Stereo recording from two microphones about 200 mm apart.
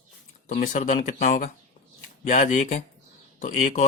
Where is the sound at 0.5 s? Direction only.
40° left (ahead or behind).